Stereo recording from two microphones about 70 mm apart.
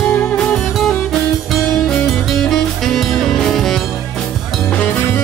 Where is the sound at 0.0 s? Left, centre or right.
Centre.